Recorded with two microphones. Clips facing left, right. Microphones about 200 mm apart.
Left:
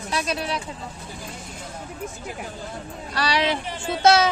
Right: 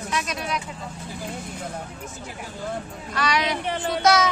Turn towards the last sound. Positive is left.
turn(degrees=30)  # may be behind; listen again after turning